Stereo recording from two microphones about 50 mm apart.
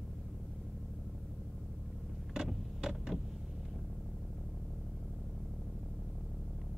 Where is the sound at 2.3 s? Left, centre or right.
Centre.